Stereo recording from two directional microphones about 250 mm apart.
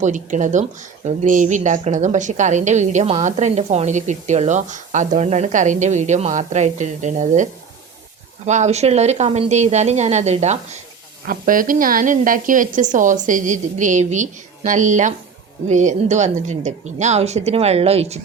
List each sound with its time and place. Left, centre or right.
0.0 s a woman's voice: right
8.4 s a woman's voice: right